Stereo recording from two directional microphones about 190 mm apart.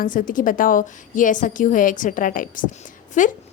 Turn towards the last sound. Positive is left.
turn(degrees=40)  # may be behind; listen again after turning